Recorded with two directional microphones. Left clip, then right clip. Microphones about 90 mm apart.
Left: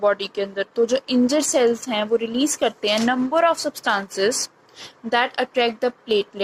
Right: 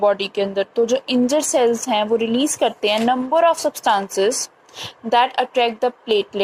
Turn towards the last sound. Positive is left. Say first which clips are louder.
# right 3 dB
turn(degrees=-30)  # may be behind; listen again after turning